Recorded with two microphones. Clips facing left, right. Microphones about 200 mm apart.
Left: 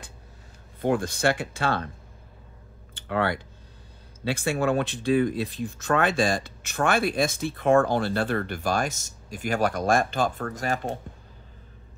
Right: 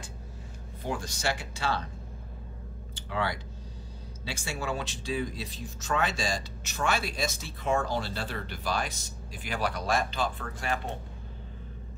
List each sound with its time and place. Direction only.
0.8 s speech: 55° left (ahead or behind)
2.9 s a sound: 55° left (ahead or behind)
4.2 s speech: 55° left (ahead or behind); by 11.0 s 40° left (ahead or behind)